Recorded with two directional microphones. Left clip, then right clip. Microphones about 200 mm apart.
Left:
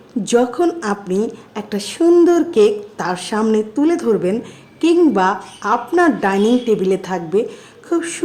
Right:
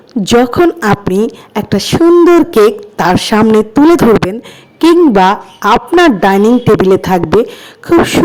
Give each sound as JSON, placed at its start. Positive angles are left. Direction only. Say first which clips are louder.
{"t": 0.1, "sound": "a woman's voice", "louder": "right 7 dB", "side_deg": -35}